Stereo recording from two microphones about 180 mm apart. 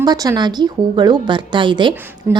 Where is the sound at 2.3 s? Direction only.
15° right (ahead or behind).